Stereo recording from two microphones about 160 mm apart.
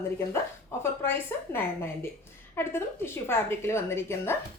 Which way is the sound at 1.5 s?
15° left (ahead or behind).